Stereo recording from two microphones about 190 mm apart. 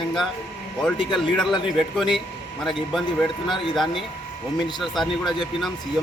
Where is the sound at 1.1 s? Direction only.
Centre (ahead or behind).